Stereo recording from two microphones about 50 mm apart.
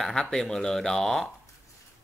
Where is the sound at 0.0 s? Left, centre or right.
Centre.